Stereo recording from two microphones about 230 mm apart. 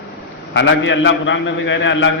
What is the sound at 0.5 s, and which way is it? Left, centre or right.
A man's voice, left.